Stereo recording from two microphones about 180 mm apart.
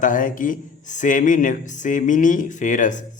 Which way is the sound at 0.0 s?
45° left (ahead or behind).